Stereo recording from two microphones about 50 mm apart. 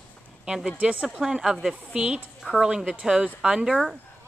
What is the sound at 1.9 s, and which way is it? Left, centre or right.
A woman's voice, right.